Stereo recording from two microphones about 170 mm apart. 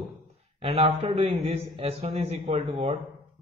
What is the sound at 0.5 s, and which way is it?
A man's voice, 35° right (ahead or behind).